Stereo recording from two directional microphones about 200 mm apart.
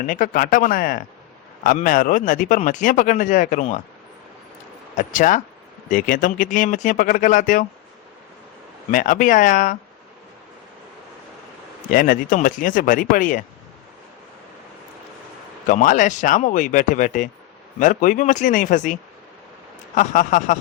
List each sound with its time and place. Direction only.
0.0 s speech: 45° left (ahead or behind)
4.9 s speech: 40° left (ahead or behind)
8.9 s speech: 45° left (ahead or behind)
11.9 s speech: 45° left (ahead or behind)
15.6 s speech: 40° left (ahead or behind)
20.0 s speech: 40° left (ahead or behind)